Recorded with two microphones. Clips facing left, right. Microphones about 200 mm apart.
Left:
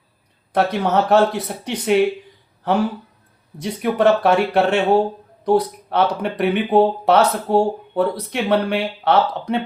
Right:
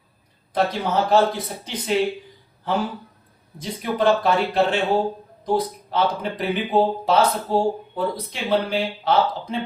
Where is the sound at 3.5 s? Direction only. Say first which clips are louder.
Left 5 dB; 65° left (ahead or behind).